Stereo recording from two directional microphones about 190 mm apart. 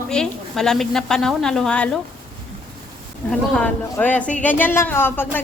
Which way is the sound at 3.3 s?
5° left (ahead or behind).